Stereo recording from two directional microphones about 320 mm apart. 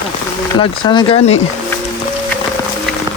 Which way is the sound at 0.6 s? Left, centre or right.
Centre.